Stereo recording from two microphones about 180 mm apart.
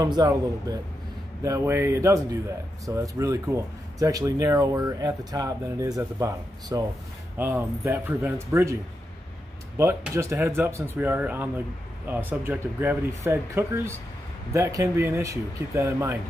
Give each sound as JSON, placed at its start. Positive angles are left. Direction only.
{"t": 0.0, "sound": "speech", "side_deg": -20}
{"t": 9.8, "sound": "speech", "side_deg": -15}